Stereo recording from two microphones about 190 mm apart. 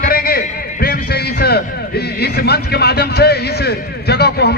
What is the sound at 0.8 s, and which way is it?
A man's voice, 55° left (ahead or behind).